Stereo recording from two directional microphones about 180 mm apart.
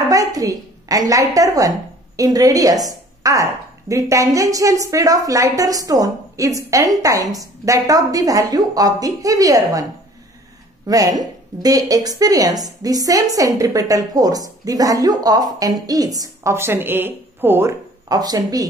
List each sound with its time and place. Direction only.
0.1 s a woman's voice: 20° right (ahead or behind)
10.9 s speech: 20° right (ahead or behind)